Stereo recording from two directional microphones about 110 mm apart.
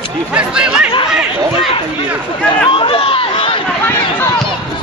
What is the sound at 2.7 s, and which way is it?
Run, 55° left (ahead or behind).